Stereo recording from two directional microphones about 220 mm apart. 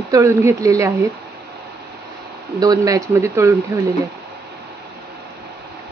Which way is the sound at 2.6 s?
15° right (ahead or behind).